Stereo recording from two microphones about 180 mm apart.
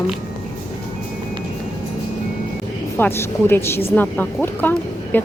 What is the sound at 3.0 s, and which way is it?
Speech, 10° left (ahead or behind).